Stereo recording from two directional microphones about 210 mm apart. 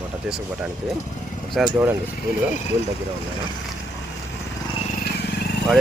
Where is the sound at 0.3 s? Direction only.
Centre (ahead or behind).